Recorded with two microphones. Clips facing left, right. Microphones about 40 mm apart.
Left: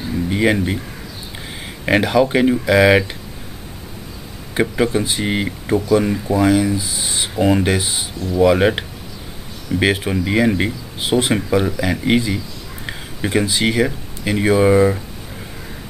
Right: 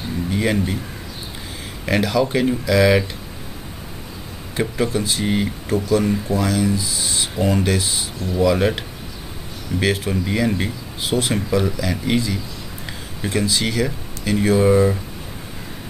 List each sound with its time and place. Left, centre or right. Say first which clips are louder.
0.3 s speech: left 4 dB; left
1.9 s speech: left 4 dB; left
4.6 s speech: left 4 dB; left